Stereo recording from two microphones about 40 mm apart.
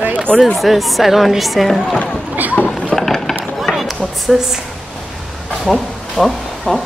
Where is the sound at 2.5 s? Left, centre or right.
Left.